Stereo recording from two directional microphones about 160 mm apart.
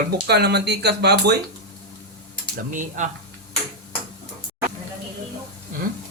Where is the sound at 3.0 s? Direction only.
50° right (ahead or behind).